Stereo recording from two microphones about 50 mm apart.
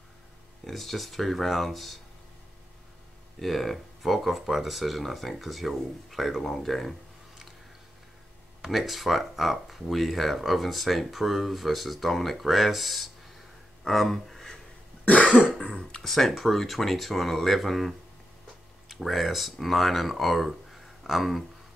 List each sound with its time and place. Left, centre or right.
0.7 s speech: centre
3.3 s speech: centre
8.6 s speech: centre
15.0 s cough: left
15.6 s a sound: left
16.0 s speech: centre